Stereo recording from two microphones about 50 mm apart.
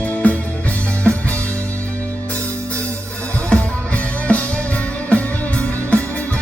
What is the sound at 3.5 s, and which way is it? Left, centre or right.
Music, centre.